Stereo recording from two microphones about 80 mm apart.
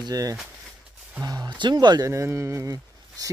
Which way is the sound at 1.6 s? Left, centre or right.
Right.